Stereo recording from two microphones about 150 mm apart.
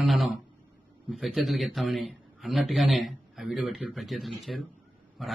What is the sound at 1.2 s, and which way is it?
A man's voice, centre (ahead or behind).